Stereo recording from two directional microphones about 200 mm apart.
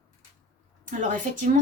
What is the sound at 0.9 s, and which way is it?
Speech, 40° right (ahead or behind).